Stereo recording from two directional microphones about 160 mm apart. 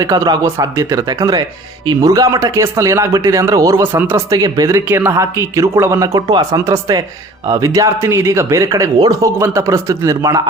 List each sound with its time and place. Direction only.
0.0 s speech: 25° right (ahead or behind)